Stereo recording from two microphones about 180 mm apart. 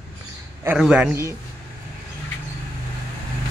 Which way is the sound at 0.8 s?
5° right (ahead or behind).